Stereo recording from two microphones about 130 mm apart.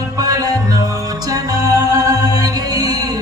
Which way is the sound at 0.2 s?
30° right (ahead or behind).